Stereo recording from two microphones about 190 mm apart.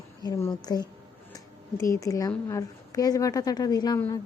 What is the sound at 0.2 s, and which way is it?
A woman's voice, 15° left (ahead or behind).